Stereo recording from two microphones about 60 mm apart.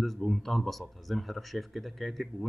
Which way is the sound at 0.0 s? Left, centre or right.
Centre.